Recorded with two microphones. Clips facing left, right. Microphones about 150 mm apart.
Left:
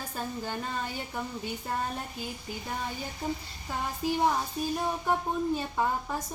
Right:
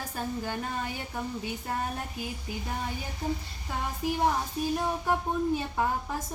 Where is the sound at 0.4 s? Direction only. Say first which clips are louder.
Right 1 dB; 10° right (ahead or behind).